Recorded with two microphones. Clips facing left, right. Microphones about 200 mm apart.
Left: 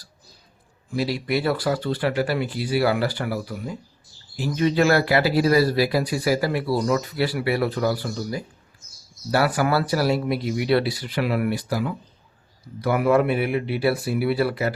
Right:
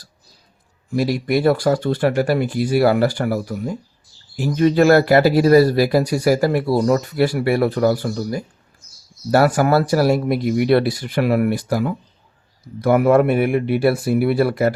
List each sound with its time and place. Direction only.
0.9 s speech: 45° right (ahead or behind)